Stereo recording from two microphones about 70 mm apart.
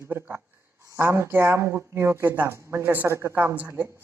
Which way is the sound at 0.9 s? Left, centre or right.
Right.